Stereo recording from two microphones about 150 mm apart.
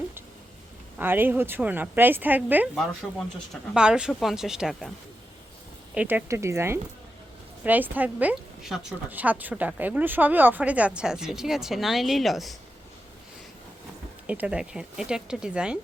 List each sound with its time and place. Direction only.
0.9 s a woman's voice: 15° right (ahead or behind)
5.9 s a woman's voice: 10° right (ahead or behind)
14.3 s a woman's voice: 5° right (ahead or behind)